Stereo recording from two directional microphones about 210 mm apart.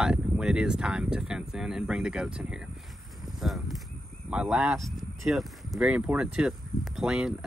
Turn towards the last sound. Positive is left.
turn(degrees=-5)  # may be behind; listen again after turning